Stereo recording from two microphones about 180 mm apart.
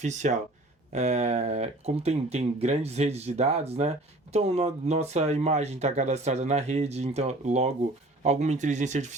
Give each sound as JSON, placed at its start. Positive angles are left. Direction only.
{"t": 0.0, "sound": "speech", "side_deg": -40}